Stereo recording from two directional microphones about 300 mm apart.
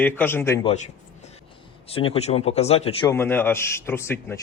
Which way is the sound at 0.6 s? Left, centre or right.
Left.